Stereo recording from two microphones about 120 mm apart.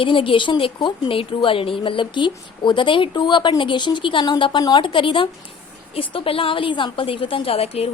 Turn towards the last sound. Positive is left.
turn(degrees=55)  # may be behind; listen again after turning